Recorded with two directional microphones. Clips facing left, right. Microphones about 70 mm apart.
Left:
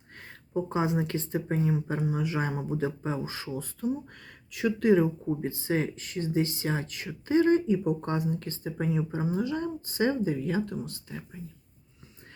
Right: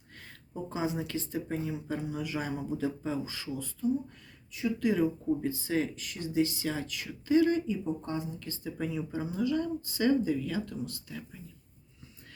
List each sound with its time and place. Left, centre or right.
0.2 s speech: left
3.8 s speech: left
4.8 s speech: left
7.9 s speech: left
8.4 s speech: left